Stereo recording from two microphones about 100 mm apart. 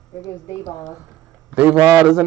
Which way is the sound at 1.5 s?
15° right (ahead or behind).